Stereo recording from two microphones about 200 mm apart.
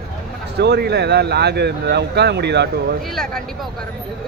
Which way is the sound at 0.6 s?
55° right (ahead or behind).